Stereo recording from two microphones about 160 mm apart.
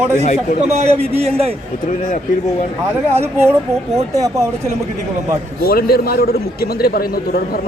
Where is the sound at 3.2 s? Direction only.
15° right (ahead or behind).